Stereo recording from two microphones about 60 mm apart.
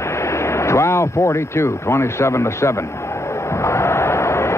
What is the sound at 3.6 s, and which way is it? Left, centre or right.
Vehicle, left.